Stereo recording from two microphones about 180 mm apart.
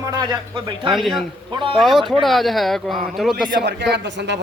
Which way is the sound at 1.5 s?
30° right (ahead or behind).